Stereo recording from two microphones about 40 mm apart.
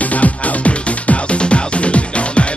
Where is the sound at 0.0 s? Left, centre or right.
Left.